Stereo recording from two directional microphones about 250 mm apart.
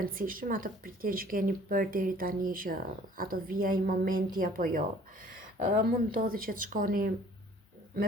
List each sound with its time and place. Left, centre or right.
0.0 s speech: right